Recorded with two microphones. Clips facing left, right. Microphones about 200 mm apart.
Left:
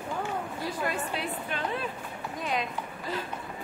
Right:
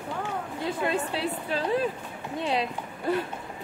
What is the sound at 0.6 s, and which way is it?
A woman's voice, 25° right (ahead or behind).